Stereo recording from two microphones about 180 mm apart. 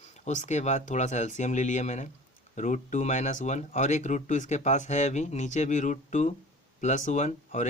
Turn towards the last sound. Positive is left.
turn(degrees=40)  # may be behind; listen again after turning